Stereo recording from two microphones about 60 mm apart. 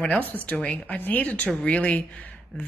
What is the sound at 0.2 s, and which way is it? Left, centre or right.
Speech, left.